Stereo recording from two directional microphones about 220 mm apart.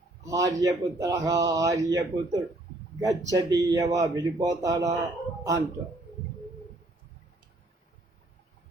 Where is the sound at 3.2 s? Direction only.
15° right (ahead or behind).